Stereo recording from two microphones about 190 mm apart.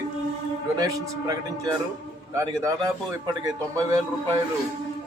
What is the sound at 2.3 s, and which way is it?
Speech, 20° right (ahead or behind).